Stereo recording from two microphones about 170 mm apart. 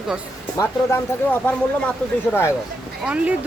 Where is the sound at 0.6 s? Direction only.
15° left (ahead or behind).